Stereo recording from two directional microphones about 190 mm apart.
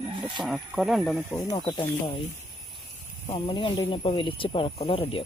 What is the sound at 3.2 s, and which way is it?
Speech, 25° left (ahead or behind).